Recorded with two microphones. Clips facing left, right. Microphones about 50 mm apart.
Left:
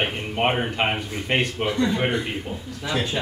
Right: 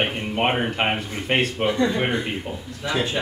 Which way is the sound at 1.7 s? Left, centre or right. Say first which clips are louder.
Even; right.